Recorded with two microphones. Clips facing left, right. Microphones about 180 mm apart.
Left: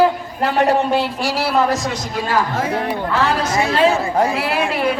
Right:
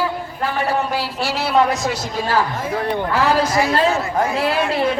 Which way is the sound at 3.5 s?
25° left (ahead or behind).